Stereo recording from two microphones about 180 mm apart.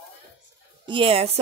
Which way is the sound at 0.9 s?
30° right (ahead or behind).